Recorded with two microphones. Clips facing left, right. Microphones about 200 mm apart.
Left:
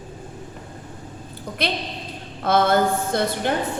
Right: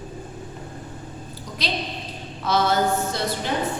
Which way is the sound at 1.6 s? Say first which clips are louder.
Left 2 dB; 55° left (ahead or behind).